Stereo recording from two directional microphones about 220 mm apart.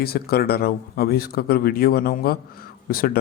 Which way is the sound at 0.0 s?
45° left (ahead or behind).